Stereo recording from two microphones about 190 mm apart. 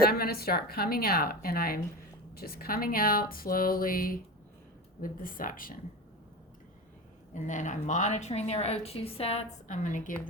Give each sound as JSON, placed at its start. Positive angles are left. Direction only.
{"t": 0.0, "sound": "speech", "side_deg": 55}
{"t": 7.3, "sound": "a woman's voice", "side_deg": 40}